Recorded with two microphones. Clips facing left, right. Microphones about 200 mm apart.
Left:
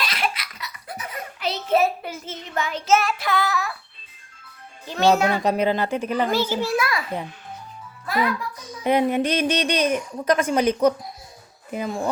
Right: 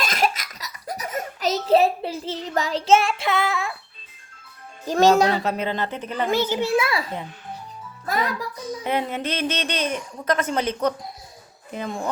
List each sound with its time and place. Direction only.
0.0 s baby laughter: 45° right (ahead or behind); by 3.8 s 25° right (ahead or behind)
4.9 s speech: 40° right (ahead or behind)
5.4 s speech: 15° left (ahead or behind)
6.2 s a child's voice: 20° right (ahead or behind)
8.8 s speech: 15° left (ahead or behind)